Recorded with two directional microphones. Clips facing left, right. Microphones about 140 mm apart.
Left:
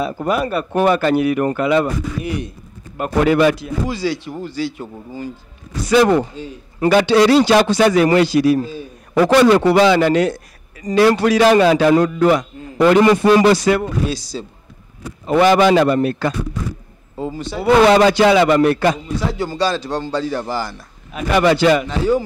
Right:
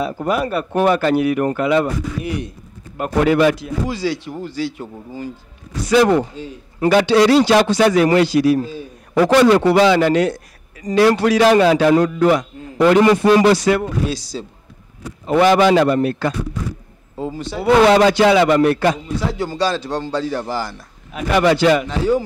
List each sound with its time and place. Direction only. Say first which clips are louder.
0.0 s a man's voice: even; 10° left (ahead or behind)
6.8 s a man's voice: even; 10° left (ahead or behind)
9.6 s a man's voice: even; 10° left (ahead or behind)